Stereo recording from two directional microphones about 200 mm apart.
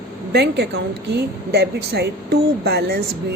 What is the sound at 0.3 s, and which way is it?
A woman's voice, 55° right (ahead or behind).